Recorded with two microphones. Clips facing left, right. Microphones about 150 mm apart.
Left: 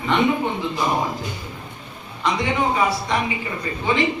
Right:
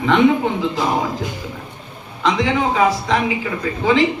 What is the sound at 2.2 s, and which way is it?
A man's voice, 90° right.